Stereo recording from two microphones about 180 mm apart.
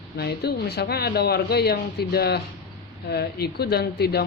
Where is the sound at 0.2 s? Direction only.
60° left (ahead or behind).